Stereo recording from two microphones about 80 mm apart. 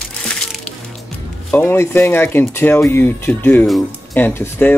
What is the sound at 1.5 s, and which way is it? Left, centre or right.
Speech, left.